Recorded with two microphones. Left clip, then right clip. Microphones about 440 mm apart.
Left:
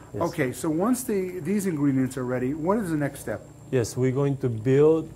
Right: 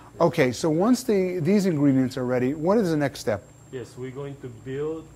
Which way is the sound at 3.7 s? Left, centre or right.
Left.